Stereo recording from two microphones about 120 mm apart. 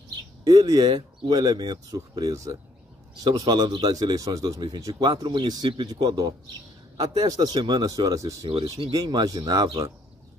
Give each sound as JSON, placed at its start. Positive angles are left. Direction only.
{"t": 0.1, "sound": "speech", "side_deg": -35}